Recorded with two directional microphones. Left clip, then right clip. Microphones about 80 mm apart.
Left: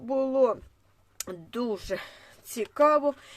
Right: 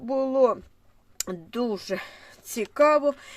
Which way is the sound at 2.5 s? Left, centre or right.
Right.